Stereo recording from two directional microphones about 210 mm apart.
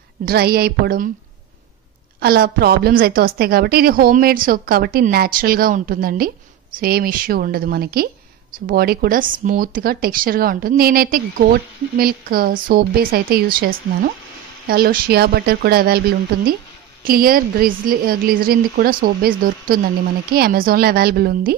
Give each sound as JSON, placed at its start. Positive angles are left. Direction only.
{"t": 0.2, "sound": "a woman's voice", "side_deg": -45}
{"t": 2.1, "sound": "a woman's voice", "side_deg": -45}
{"t": 17.0, "sound": "a woman's voice", "side_deg": -45}